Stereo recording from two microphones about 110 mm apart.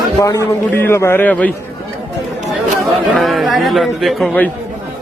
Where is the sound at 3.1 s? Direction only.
Centre (ahead or behind).